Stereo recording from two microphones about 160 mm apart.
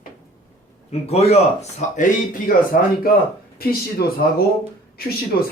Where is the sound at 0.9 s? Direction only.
40° left (ahead or behind).